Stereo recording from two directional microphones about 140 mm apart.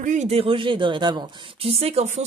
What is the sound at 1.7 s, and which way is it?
Speech, 45° right (ahead or behind).